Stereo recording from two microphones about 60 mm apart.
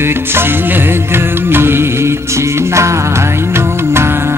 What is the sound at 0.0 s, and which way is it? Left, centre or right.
Music, right.